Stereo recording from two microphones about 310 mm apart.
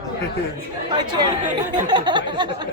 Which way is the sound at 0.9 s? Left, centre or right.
Centre.